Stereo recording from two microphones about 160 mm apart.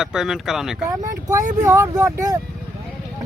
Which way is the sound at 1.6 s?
20° right (ahead or behind).